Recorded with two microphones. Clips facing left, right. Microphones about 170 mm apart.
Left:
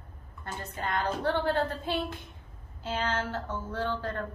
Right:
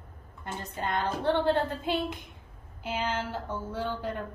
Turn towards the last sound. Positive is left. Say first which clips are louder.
# even
turn(degrees=-10)  # may be behind; listen again after turning